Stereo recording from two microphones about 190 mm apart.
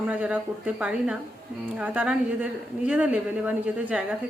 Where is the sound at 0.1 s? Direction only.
5° right (ahead or behind).